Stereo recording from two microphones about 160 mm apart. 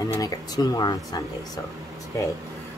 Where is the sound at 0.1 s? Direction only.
20° left (ahead or behind).